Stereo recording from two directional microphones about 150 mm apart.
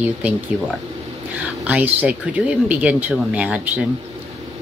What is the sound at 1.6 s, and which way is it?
Speech, 10° right (ahead or behind).